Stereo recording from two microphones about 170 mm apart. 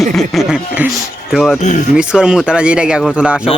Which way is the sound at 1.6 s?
45° left (ahead or behind).